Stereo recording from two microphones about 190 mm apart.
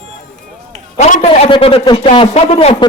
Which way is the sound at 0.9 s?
35° left (ahead or behind).